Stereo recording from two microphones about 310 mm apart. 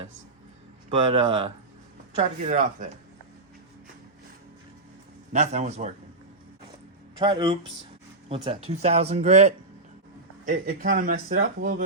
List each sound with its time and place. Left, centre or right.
0.9 s speech: centre
5.3 s speech: right
7.2 s speech: centre